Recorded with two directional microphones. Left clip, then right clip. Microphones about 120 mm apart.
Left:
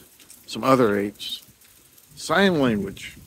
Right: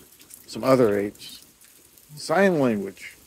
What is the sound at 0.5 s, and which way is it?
Speech, 25° left (ahead or behind).